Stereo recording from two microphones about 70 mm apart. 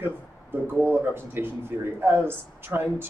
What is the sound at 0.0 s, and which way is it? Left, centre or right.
Speech, right.